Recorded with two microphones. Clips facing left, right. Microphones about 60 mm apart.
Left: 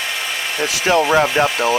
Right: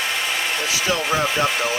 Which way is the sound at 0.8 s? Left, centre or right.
Left.